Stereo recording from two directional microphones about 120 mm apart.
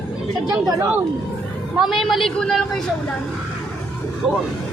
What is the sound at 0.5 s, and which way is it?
Speech, 30° right (ahead or behind).